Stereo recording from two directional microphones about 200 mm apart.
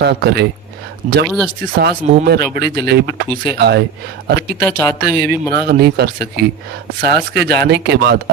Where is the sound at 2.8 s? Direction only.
55° right (ahead or behind).